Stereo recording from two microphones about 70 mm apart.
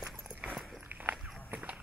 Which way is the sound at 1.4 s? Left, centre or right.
Right.